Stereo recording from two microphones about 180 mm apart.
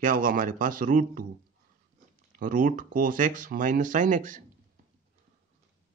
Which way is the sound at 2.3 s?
50° right (ahead or behind).